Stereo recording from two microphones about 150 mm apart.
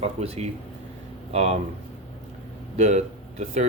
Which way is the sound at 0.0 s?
45° right (ahead or behind).